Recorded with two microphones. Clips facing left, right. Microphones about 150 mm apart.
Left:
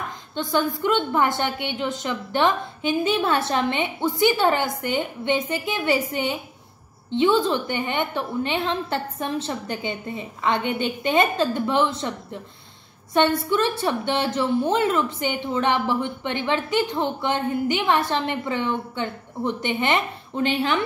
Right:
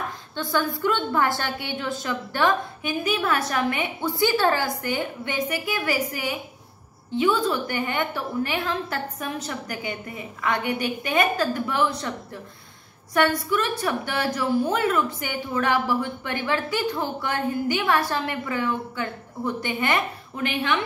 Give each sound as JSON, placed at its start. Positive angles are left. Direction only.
{"t": 0.4, "sound": "a woman's voice", "side_deg": 20}